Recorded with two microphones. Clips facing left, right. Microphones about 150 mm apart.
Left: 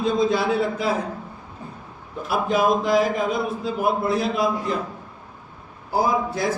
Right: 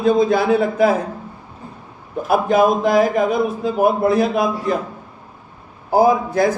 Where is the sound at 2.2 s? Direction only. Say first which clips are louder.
Right 6 dB; 55° right (ahead or behind).